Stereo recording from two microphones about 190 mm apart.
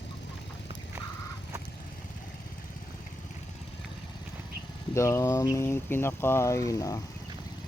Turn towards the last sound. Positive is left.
turn(degrees=15)  # may be behind; listen again after turning